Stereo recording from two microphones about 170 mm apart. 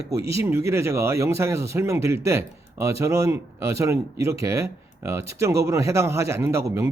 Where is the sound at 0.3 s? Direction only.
15° right (ahead or behind).